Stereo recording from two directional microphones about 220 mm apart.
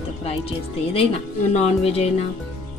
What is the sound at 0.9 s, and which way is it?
A woman's voice, 25° left (ahead or behind).